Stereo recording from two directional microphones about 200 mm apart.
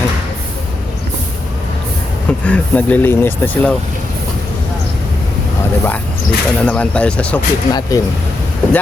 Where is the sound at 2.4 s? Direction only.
5° left (ahead or behind).